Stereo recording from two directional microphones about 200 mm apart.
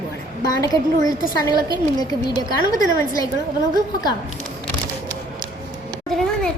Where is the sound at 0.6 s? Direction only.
20° left (ahead or behind).